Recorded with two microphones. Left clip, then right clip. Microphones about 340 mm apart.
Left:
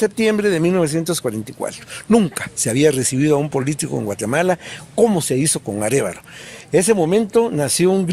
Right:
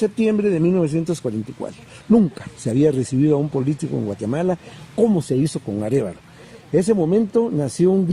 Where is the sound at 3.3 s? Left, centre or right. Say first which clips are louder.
Left 2 dB; left.